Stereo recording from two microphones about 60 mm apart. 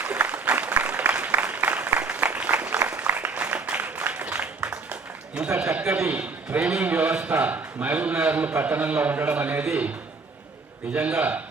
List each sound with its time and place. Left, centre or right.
0.0 s applause: right
5.8 s a man's voice: centre
6.1 s a man's voice: right
10.9 s a man's voice: right